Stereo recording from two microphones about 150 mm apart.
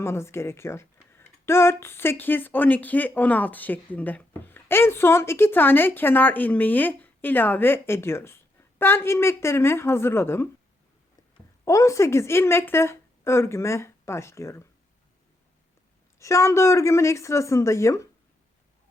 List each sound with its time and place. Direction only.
0.0 s speech: 15° left (ahead or behind)
11.6 s speech: 20° left (ahead or behind)
16.1 s speech: 20° left (ahead or behind)